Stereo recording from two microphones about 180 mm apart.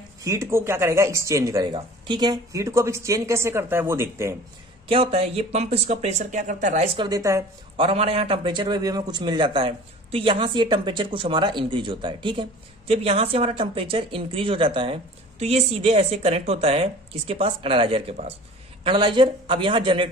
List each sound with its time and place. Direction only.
0.2 s speech: 15° right (ahead or behind)
4.8 s speech: 30° right (ahead or behind)
7.0 s speech: 20° right (ahead or behind)
7.7 s a man's voice: 35° right (ahead or behind)